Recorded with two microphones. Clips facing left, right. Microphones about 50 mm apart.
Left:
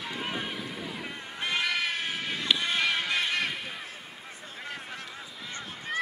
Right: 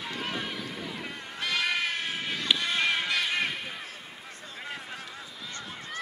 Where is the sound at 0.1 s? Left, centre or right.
Centre.